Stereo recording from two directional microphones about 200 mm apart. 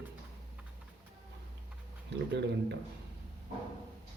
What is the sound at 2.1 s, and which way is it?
Speech, 60° right (ahead or behind).